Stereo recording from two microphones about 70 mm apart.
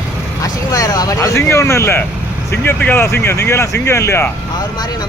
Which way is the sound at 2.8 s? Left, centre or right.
Left.